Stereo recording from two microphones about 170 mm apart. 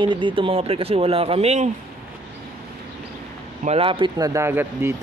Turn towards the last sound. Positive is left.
turn(degrees=-15)  # may be behind; listen again after turning